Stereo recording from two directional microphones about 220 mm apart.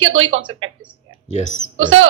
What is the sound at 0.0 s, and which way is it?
Speech, 65° right (ahead or behind).